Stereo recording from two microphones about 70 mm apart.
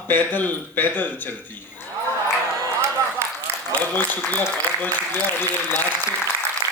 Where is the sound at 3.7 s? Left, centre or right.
Left.